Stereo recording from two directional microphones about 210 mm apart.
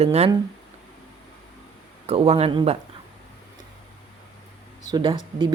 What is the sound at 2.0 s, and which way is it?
Speech, 30° right (ahead or behind).